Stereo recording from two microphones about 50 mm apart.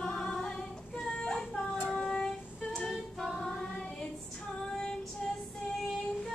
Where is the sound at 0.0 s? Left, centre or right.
Centre.